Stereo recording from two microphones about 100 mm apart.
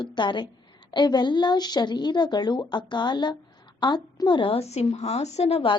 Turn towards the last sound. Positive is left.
turn(degrees=85)